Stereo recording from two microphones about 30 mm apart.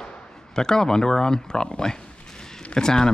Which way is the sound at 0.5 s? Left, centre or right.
Left.